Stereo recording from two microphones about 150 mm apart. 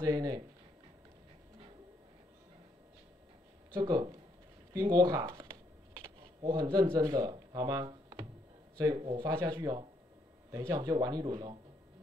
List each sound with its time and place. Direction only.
0.0 s speech: 25° right (ahead or behind)
3.7 s speech: 25° right (ahead or behind)
4.8 s shuffling cards: 25° right (ahead or behind)
6.9 s speech: 25° right (ahead or behind)
9.2 s speech: 15° right (ahead or behind)
9.5 s speech: 30° right (ahead or behind)